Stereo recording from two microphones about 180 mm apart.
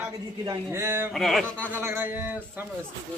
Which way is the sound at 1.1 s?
Centre (ahead or behind).